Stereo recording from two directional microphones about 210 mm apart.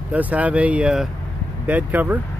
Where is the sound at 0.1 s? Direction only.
5° right (ahead or behind).